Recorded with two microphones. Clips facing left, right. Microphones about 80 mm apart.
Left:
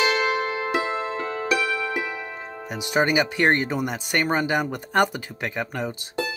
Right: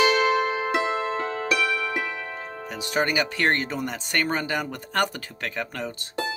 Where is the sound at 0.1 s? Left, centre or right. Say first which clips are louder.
Right 2 dB; right.